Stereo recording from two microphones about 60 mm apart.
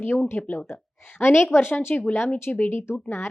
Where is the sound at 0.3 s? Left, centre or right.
Left.